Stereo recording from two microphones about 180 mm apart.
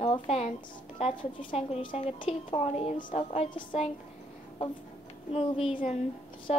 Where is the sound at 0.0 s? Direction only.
35° left (ahead or behind).